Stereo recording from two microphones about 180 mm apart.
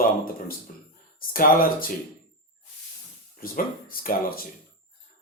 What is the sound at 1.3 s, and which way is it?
Speech, 50° left (ahead or behind).